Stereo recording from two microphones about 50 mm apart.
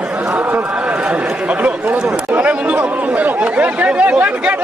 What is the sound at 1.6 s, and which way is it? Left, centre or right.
Chatter, right.